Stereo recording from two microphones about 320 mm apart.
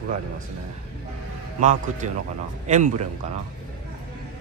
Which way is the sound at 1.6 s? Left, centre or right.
Right.